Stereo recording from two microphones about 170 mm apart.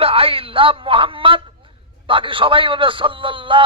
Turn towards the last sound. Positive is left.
turn(degrees=-30)  # may be behind; listen again after turning